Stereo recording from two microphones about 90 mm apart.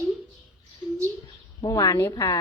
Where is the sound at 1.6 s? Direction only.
40° left (ahead or behind).